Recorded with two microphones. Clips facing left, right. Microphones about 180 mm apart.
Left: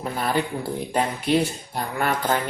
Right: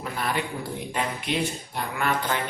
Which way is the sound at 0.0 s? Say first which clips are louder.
Left 4 dB; 35° left (ahead or behind).